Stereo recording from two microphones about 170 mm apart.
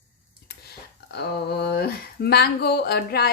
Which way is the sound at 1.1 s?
75° left (ahead or behind).